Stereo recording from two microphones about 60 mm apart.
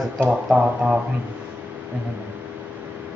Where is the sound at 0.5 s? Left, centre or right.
Centre.